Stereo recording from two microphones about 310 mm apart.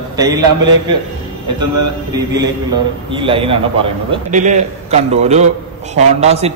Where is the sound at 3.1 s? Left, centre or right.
Centre.